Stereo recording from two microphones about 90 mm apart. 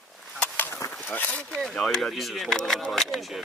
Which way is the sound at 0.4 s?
20° left (ahead or behind).